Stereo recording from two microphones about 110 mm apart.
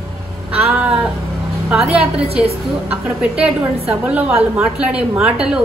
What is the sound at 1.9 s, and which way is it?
Speech, 65° right (ahead or behind).